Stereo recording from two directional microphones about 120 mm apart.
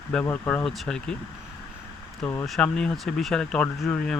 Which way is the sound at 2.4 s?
5° left (ahead or behind).